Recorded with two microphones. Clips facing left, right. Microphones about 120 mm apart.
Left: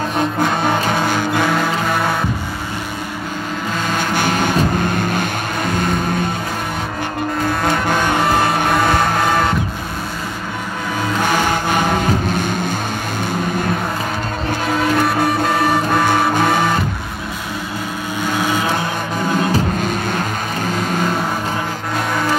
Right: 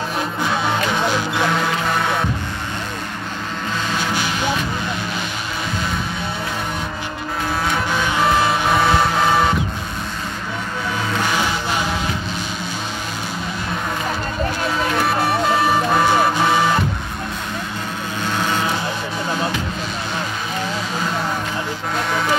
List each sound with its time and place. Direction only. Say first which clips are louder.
0.4 s music: left 1 dB; 50° left (ahead or behind)
3.9 s vehicle: left 6 dB; 50° left (ahead or behind)
7.9 s music: even; 50° left (ahead or behind)
11.3 s music: left 4 dB; 50° left (ahead or behind)
15.0 s music: left 2 dB; centre (ahead or behind)